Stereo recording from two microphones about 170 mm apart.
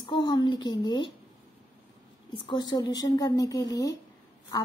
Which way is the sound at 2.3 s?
25° left (ahead or behind).